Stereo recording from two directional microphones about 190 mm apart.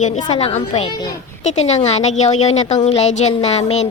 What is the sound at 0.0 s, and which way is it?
A woman's voice, 40° left (ahead or behind).